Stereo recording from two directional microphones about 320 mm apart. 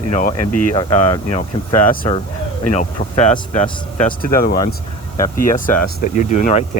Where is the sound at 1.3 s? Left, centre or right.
Left.